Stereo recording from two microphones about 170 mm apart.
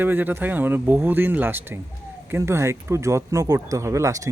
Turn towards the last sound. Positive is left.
turn(degrees=-20)  # may be behind; listen again after turning